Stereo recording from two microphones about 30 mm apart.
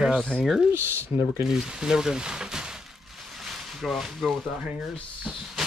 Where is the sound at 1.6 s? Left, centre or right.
Right.